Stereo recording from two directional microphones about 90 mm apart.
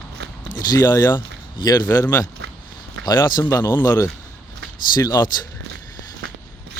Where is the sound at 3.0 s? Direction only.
55° left (ahead or behind).